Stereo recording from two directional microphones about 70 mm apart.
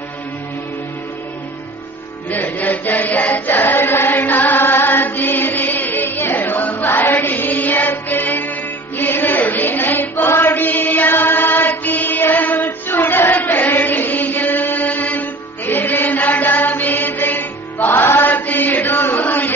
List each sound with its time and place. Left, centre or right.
2.2 s chant: left